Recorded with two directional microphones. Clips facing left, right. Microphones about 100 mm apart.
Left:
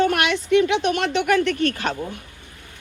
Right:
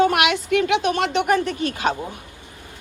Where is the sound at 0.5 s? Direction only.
50° right (ahead or behind).